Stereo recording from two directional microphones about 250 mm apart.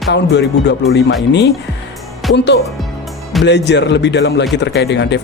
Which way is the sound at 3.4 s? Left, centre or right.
Left.